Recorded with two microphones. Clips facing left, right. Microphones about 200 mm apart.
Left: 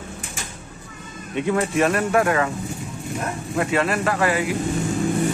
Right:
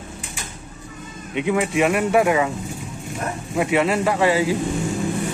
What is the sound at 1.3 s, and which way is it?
Speech, 10° right (ahead or behind).